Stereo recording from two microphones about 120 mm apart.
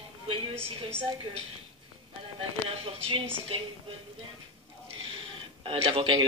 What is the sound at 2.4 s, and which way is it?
Speech, 55° right (ahead or behind).